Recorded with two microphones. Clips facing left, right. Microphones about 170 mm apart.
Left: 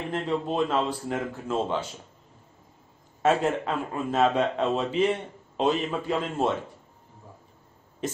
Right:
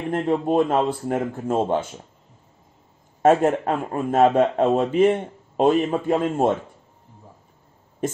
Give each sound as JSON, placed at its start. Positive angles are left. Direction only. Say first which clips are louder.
{"t": 0.1, "sound": "a man's voice", "louder": "right 8 dB", "side_deg": -55}
{"t": 3.2, "sound": "a man's voice", "louder": "right 6 dB", "side_deg": -50}
{"t": 8.0, "sound": "speech", "louder": "right 6 dB", "side_deg": -50}